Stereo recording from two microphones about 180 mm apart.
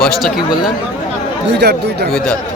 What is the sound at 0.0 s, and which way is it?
Speech, centre (ahead or behind).